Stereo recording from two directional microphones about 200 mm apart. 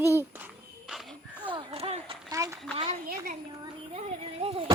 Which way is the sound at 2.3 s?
15° right (ahead or behind).